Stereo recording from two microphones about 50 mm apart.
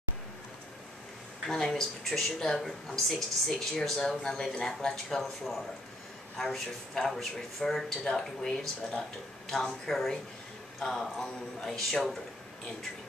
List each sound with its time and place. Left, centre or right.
1.5 s speech: centre
9.7 s speech: centre